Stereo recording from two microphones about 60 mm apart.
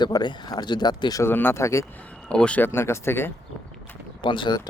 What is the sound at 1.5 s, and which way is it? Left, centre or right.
Speech, left.